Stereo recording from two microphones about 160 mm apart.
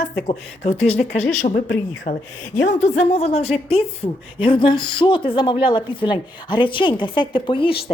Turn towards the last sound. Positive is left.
turn(degrees=30)  # may be behind; listen again after turning